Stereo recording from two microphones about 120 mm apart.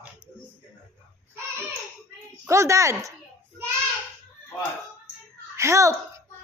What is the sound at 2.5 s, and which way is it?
Speech, 25° right (ahead or behind).